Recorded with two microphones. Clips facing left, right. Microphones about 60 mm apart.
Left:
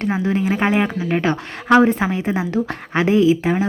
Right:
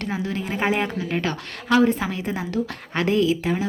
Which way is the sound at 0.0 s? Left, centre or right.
Left.